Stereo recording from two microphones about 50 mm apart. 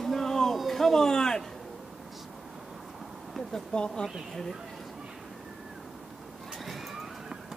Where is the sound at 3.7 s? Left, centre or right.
Centre.